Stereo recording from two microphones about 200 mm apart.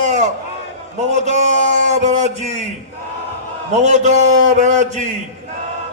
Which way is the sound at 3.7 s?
35° right (ahead or behind).